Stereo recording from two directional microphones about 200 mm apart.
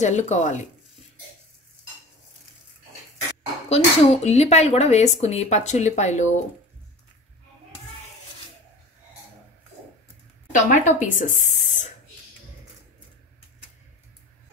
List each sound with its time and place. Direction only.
0.0 s speech: 35° left (ahead or behind)
3.6 s speech: 30° left (ahead or behind)
10.5 s a woman's voice: 40° left (ahead or behind)